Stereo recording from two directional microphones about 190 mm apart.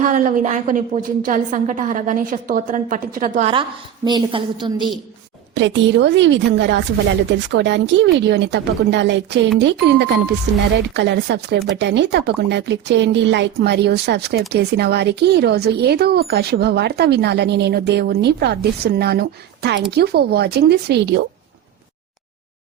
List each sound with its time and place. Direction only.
0.0 s a woman's voice: 45° right (ahead or behind)
3.5 s a woman's voice: 25° right (ahead or behind)
5.5 s speech: 70° right (ahead or behind)